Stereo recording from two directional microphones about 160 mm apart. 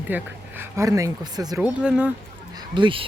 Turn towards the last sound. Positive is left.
turn(degrees=-30)  # may be behind; listen again after turning